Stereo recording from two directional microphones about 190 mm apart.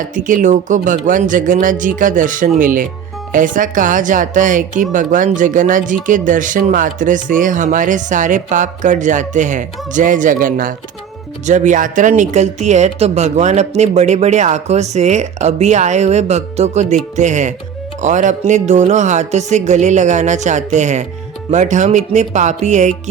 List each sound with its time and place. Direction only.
0.1 s speech: 45° right (ahead or behind)